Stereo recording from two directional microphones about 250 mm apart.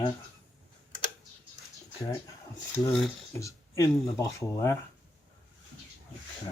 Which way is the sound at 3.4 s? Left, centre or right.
Centre.